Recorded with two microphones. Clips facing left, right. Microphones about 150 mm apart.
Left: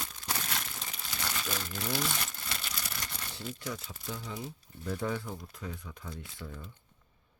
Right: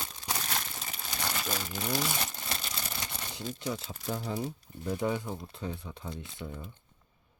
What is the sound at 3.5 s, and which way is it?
Speech, 25° right (ahead or behind).